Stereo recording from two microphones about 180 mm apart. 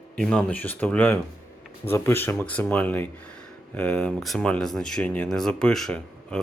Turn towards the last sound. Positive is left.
turn(degrees=5)  # may be behind; listen again after turning